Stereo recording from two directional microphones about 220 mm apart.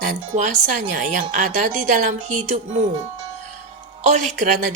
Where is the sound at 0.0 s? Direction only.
35° right (ahead or behind).